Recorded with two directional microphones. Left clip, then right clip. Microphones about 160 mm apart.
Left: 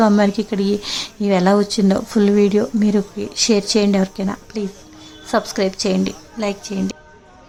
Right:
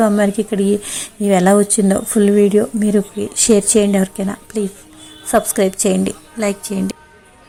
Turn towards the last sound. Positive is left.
turn(degrees=-15)  # may be behind; listen again after turning